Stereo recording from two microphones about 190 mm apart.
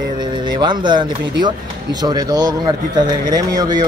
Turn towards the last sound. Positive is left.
turn(degrees=-20)  # may be behind; listen again after turning